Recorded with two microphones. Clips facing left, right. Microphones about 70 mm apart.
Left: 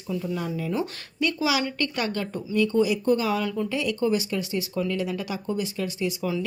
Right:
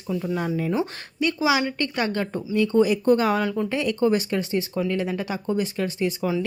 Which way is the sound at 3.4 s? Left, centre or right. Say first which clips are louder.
Right 3 dB; right.